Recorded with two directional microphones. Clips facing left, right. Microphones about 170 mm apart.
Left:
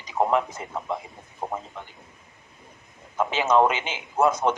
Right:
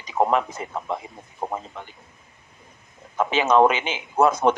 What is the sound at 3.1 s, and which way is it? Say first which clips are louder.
A man's voice: right 2 dB; 70° right (ahead or behind).